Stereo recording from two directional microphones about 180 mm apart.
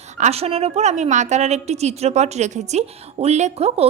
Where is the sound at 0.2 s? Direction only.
35° right (ahead or behind).